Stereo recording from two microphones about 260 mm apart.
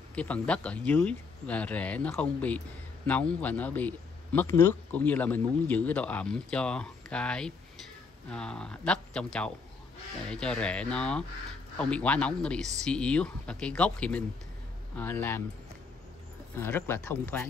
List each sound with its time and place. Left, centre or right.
0.1 s a man's voice: centre
16.5 s speech: centre